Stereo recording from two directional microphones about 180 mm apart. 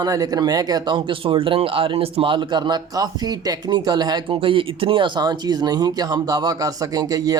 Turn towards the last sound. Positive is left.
turn(degrees=-20)  # may be behind; listen again after turning